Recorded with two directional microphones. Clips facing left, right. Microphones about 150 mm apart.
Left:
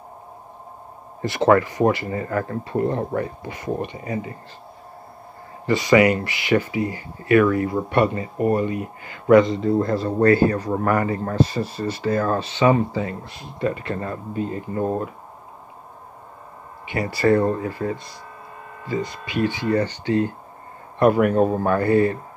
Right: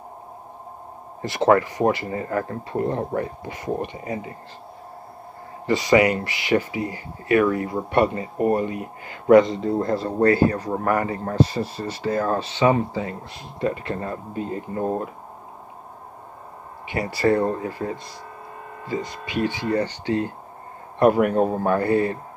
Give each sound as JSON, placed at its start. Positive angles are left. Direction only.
{"t": 1.4, "sound": "speech", "side_deg": -15}
{"t": 1.9, "sound": "a man's voice", "side_deg": -25}
{"t": 5.7, "sound": "speech", "side_deg": -30}
{"t": 9.6, "sound": "a man's voice", "side_deg": -25}
{"t": 16.8, "sound": "a man's voice", "side_deg": -30}
{"t": 19.2, "sound": "speech", "side_deg": -40}
{"t": 19.7, "sound": "a man's voice", "side_deg": -20}
{"t": 21.0, "sound": "speech", "side_deg": -35}
{"t": 21.4, "sound": "a man's voice", "side_deg": -20}